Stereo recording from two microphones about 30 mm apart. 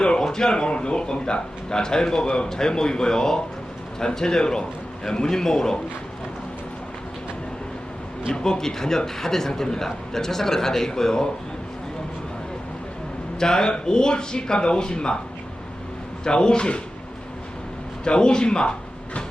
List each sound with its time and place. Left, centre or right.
0.0 s a sound: left
0.3 s a man's voice: left
8.3 s a man's voice: centre
13.4 s a man's voice: left
16.2 s speech: left
18.0 s a man's voice: left